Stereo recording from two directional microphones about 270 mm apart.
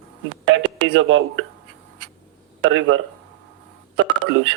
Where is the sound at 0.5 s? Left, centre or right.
Right.